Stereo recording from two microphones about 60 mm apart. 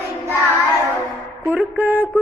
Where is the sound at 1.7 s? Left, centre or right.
Right.